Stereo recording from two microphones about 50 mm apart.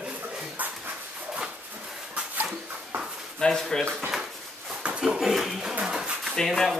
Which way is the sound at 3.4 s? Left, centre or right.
Centre.